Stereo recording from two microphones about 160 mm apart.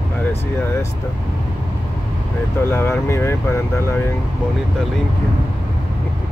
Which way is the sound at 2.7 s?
15° left (ahead or behind).